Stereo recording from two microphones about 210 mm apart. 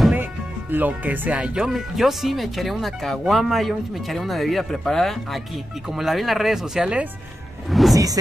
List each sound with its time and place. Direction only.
0.0 s speech: 10° right (ahead or behind)
7.9 s speech: 15° right (ahead or behind)